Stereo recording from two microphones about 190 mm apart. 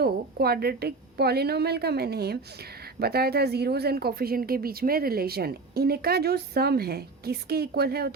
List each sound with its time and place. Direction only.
0.0 s speech: 55° right (ahead or behind)